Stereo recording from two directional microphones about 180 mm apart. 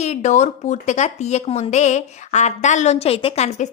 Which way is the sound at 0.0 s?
40° left (ahead or behind).